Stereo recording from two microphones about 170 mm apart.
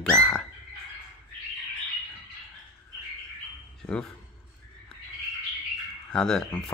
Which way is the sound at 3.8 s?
5° left (ahead or behind).